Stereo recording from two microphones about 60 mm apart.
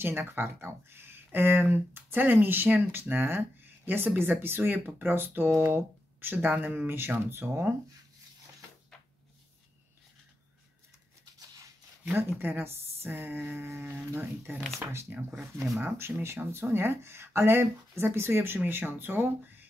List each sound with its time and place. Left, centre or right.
0.0 s speech: right
6.9 s speech: right
12.4 s speech: right